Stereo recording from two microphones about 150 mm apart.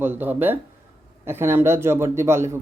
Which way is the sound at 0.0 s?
15° right (ahead or behind).